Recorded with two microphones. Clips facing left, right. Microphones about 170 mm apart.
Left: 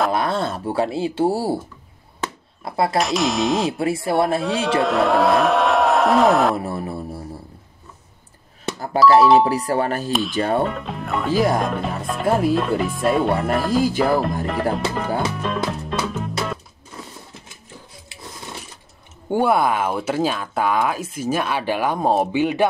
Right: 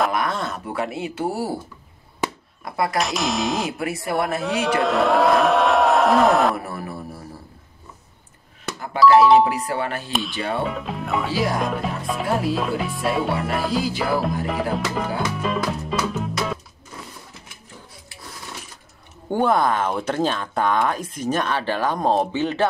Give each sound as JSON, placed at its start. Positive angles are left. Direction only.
{"t": 0.1, "sound": "speech", "side_deg": 30}
{"t": 2.6, "sound": "speech", "side_deg": 30}
{"t": 3.0, "sound": "speech", "side_deg": 0}
{"t": 3.7, "sound": "speech", "side_deg": 30}
{"t": 4.4, "sound": "a man's voice", "side_deg": 0}
{"t": 6.5, "sound": "speech", "side_deg": 25}
{"t": 8.6, "sound": "music", "side_deg": 35}
{"t": 9.4, "sound": "speech", "side_deg": 35}
{"t": 10.6, "sound": "speech", "side_deg": 0}
{"t": 15.3, "sound": "music", "side_deg": 0}
{"t": 19.3, "sound": "speech", "side_deg": 10}